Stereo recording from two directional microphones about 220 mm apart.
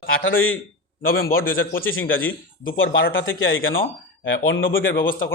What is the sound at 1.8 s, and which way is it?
A man's voice, 65° left (ahead or behind).